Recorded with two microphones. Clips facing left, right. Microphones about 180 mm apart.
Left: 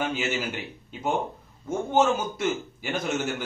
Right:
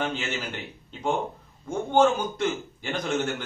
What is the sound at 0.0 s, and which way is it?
A man's voice, 10° left (ahead or behind).